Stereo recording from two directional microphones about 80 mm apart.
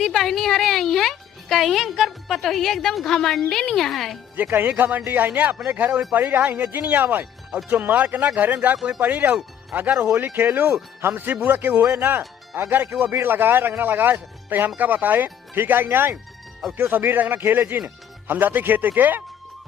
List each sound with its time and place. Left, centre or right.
0.0 s a woman's voice: centre
4.4 s speech: right